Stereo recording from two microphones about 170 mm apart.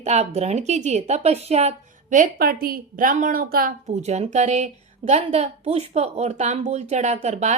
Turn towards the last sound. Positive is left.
turn(degrees=-45)  # may be behind; listen again after turning